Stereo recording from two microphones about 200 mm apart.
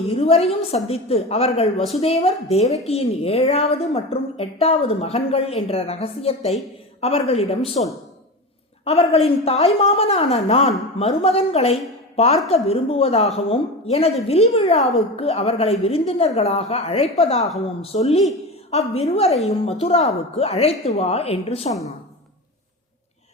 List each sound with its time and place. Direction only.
0.2 s a woman's voice: 30° left (ahead or behind)
8.8 s a woman's voice: 30° left (ahead or behind)